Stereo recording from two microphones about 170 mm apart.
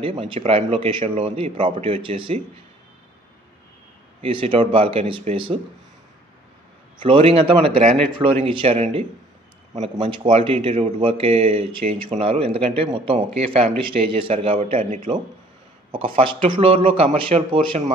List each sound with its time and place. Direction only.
0.0 s speech: 30° right (ahead or behind)
4.2 s speech: 30° right (ahead or behind)
7.0 s speech: 30° right (ahead or behind)